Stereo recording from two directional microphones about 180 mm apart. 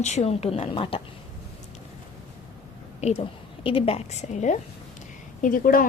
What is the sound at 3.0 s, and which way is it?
A woman's voice, 35° left (ahead or behind).